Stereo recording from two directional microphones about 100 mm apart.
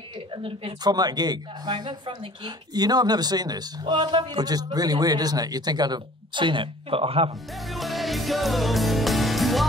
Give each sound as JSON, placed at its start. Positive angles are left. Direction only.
{"t": 0.8, "sound": "speech", "side_deg": -40}
{"t": 7.5, "sound": "music", "side_deg": 0}